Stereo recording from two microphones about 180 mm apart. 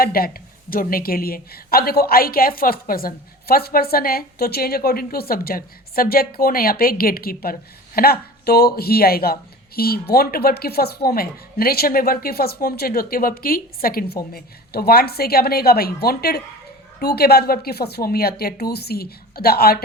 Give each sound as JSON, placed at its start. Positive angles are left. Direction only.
{"t": 0.0, "sound": "a woman's voice", "side_deg": 55}